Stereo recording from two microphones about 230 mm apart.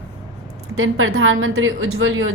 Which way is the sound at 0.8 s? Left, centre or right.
Right.